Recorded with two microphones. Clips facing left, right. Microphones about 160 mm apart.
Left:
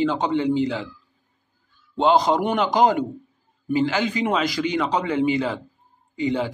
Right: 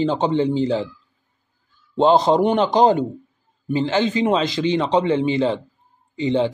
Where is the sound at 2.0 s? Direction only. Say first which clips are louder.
Right 3 dB; 25° right (ahead or behind).